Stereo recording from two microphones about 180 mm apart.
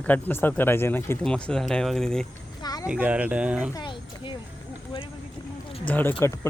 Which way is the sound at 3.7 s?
25° left (ahead or behind).